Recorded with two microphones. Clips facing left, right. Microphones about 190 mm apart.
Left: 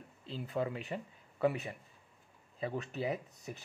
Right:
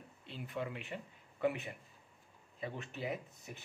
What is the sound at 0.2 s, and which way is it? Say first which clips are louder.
Speech: left 5 dB; 35° left (ahead or behind).